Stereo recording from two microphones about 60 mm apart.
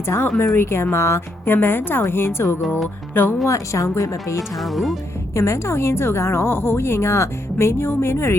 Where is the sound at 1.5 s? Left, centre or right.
Left.